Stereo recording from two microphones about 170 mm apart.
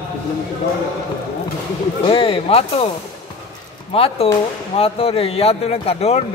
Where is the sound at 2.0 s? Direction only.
30° left (ahead or behind).